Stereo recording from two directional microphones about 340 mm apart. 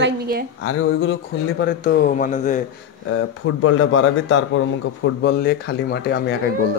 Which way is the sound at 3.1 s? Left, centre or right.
Left.